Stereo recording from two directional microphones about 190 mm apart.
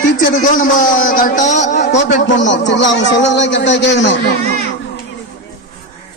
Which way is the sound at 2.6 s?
70° left (ahead or behind).